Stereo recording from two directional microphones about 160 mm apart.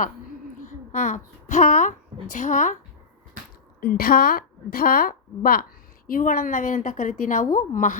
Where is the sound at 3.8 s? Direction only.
70° left (ahead or behind).